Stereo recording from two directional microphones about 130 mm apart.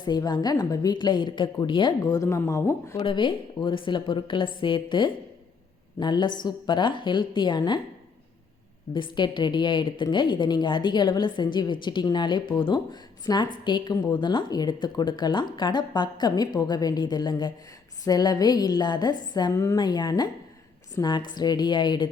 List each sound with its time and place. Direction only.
0.0 s a woman's voice: 30° left (ahead or behind)
3.1 s a woman's voice: 40° left (ahead or behind)
8.9 s a woman's voice: 35° left (ahead or behind)